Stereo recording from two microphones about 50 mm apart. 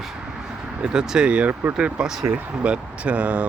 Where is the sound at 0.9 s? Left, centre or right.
Centre.